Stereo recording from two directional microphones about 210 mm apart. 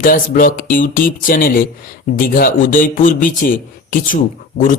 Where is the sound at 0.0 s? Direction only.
40° left (ahead or behind).